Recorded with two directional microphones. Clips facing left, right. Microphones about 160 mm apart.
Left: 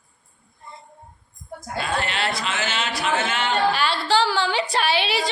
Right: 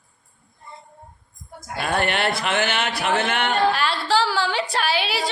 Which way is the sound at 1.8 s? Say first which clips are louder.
Right 4 dB; 60° right (ahead or behind).